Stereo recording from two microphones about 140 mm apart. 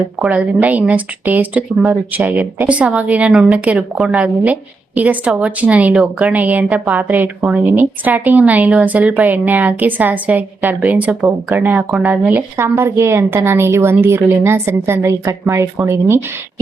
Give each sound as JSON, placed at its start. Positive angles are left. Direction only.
{"t": 0.2, "sound": "speech", "side_deg": -10}